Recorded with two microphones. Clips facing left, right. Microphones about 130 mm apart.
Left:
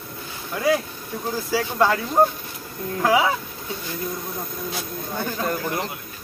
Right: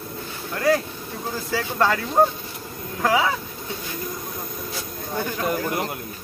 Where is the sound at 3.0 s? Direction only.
10° left (ahead or behind).